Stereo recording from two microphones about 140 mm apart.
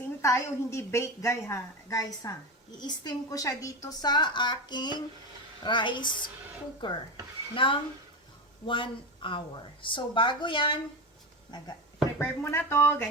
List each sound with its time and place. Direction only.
0.2 s a woman's voice: 20° left (ahead or behind); by 10.8 s 35° left (ahead or behind)
12.2 s speech: 15° left (ahead or behind)